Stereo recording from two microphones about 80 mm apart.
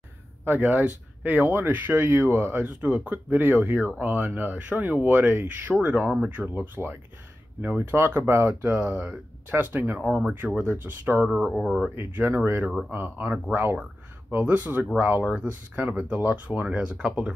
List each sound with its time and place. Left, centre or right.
0.5 s speech: right
8.7 s speech: centre
11.5 s speech: centre
11.9 s speech: right